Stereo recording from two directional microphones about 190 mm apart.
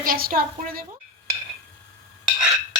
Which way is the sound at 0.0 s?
50° right (ahead or behind).